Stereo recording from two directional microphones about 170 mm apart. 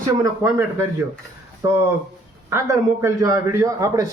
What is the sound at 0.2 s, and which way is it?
A man's voice, 20° right (ahead or behind).